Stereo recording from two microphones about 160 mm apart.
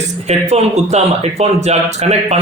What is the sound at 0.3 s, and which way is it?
Speech, 45° right (ahead or behind).